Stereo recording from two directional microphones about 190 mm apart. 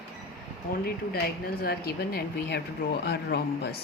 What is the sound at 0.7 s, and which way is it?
Speech, 50° left (ahead or behind).